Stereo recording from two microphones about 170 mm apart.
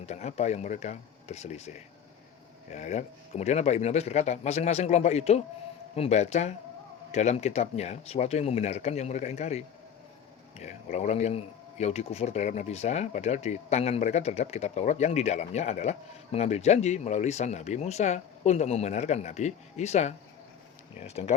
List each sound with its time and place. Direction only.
0.0 s speech: 40° left (ahead or behind)
10.9 s speech: 40° left (ahead or behind)